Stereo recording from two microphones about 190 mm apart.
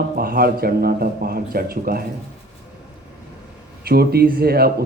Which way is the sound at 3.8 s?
55° right (ahead or behind).